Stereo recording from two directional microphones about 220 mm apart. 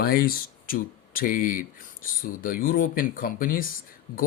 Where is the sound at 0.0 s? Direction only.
40° left (ahead or behind).